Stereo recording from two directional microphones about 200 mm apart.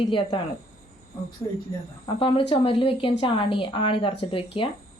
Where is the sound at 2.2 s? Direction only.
25° left (ahead or behind).